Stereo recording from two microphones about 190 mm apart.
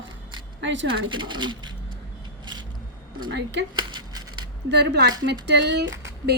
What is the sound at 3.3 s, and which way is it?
Speech, 65° right (ahead or behind).